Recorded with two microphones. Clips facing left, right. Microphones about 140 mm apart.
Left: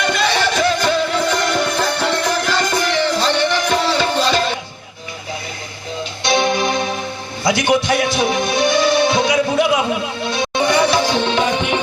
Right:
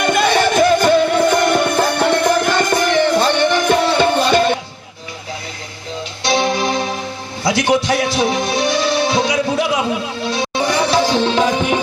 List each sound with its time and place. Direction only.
0.0 s music: 50° right (ahead or behind)
6.2 s music: 35° right (ahead or behind)
10.6 s music: centre (ahead or behind)
10.9 s tabla: 35° right (ahead or behind)